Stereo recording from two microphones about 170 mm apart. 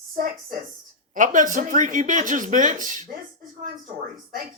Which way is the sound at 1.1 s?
50° right (ahead or behind).